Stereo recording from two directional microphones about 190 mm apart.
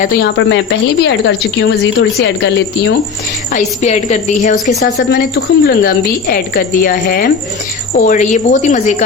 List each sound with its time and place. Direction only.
0.0 s a woman's voice: 50° left (ahead or behind)
3.5 s a woman's voice: 40° left (ahead or behind)
4.9 s a woman's voice: 60° left (ahead or behind); by 9.0 s 40° left (ahead or behind)